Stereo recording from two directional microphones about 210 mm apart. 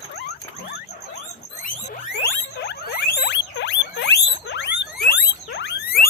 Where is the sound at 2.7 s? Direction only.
55° left (ahead or behind).